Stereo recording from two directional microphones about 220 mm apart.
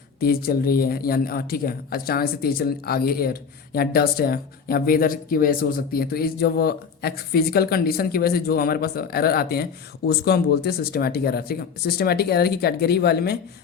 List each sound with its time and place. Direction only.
0.2 s a man's voice: 40° left (ahead or behind)